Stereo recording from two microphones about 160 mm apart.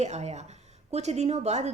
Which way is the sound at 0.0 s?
45° right (ahead or behind).